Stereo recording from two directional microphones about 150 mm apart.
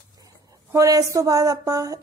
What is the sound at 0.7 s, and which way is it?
A woman's voice, 25° right (ahead or behind).